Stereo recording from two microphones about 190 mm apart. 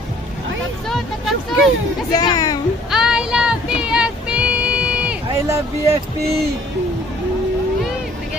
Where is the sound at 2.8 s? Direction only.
Centre (ahead or behind).